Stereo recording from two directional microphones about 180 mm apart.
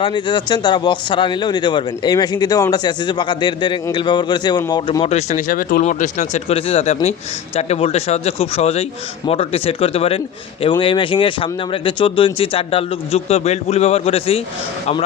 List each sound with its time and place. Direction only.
0.0 s speech: 25° left (ahead or behind)
5.0 s speech: 40° left (ahead or behind)